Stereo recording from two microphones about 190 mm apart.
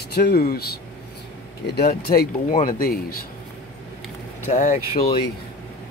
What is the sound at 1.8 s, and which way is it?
Speech, 55° left (ahead or behind).